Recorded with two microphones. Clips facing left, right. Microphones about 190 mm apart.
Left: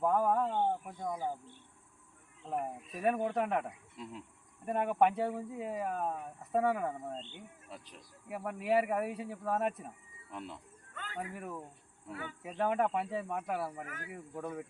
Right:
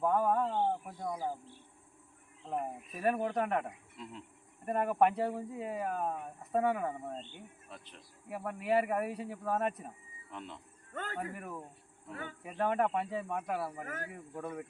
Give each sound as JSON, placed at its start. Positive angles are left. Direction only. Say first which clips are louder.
{"t": 0.0, "sound": "a sound", "louder": "even", "side_deg": 0}
{"t": 0.9, "sound": "a sound", "louder": "even", "side_deg": -10}
{"t": 2.4, "sound": "speech", "louder": "even", "side_deg": 5}
{"t": 10.9, "sound": "a sound", "louder": "right 6 dB", "side_deg": -45}
{"t": 11.3, "sound": "speech", "louder": "left 1 dB", "side_deg": 0}
{"t": 12.1, "sound": "speech", "louder": "even", "side_deg": -45}
{"t": 12.4, "sound": "speech", "louder": "even", "side_deg": 0}
{"t": 13.8, "sound": "speech", "louder": "right 5 dB", "side_deg": -45}
{"t": 14.1, "sound": "speech", "louder": "left 1 dB", "side_deg": 0}